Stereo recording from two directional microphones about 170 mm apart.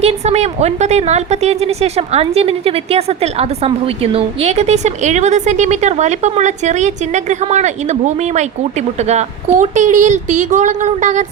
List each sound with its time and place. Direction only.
0.0 s a woman's voice: 40° right (ahead or behind)